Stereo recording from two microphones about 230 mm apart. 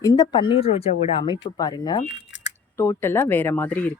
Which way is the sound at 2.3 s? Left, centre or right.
Left.